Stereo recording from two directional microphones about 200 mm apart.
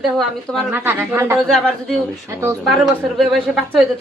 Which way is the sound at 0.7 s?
10° right (ahead or behind).